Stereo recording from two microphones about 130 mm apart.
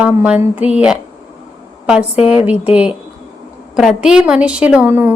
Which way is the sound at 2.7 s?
10° right (ahead or behind).